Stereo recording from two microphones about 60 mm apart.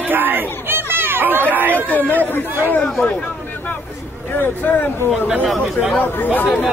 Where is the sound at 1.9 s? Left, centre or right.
Left.